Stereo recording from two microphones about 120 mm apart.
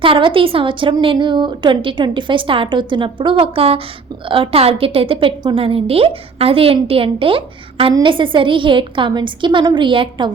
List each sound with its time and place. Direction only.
0.0 s a woman's voice: 45° right (ahead or behind)